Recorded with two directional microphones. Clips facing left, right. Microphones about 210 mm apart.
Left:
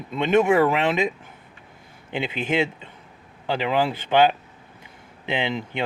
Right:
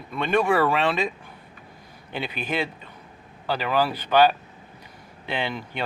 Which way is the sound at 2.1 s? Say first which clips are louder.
Left 4 dB; 20° left (ahead or behind).